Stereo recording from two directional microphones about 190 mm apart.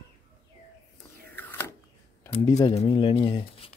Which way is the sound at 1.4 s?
10° left (ahead or behind).